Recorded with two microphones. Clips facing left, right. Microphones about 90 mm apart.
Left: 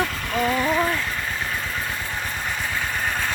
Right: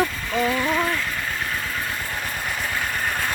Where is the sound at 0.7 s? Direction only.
10° left (ahead or behind).